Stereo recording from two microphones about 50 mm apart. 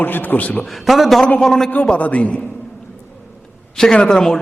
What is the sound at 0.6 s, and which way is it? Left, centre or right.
A man's voice, centre.